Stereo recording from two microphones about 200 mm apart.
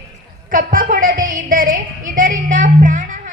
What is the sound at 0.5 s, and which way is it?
Music, 45° right (ahead or behind).